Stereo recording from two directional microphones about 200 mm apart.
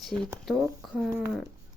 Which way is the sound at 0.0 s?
Centre (ahead or behind).